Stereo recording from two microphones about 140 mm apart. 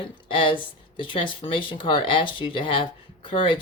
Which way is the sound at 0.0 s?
35° left (ahead or behind).